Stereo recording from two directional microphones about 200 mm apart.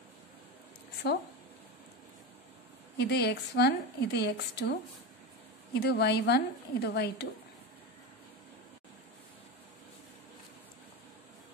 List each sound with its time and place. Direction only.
3.0 s a woman's voice: 55° left (ahead or behind)